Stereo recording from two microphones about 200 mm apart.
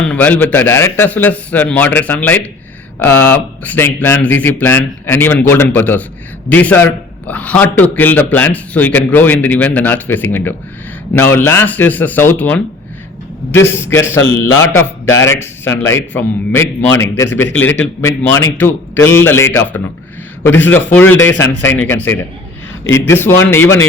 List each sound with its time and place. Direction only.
0.0 s a man's voice: 5° left (ahead or behind)
22.8 s speech: 75° left (ahead or behind)
23.1 s a man's voice: 10° left (ahead or behind)